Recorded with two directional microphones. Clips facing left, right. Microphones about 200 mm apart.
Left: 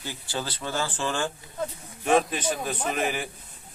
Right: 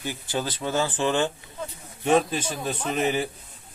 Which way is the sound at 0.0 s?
15° right (ahead or behind).